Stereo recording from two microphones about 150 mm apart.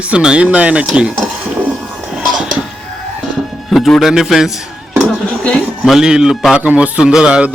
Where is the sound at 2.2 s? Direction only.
5° right (ahead or behind).